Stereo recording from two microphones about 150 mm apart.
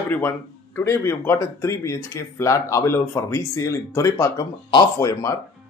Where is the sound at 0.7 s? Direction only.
20° left (ahead or behind).